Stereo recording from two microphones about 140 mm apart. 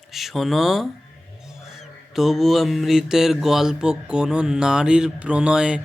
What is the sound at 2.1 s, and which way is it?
Mantra, centre (ahead or behind).